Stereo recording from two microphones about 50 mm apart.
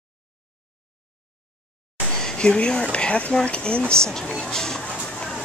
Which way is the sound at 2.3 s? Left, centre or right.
Centre.